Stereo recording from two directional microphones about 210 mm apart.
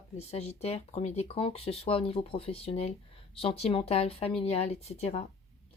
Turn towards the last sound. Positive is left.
turn(degrees=30)  # may be behind; listen again after turning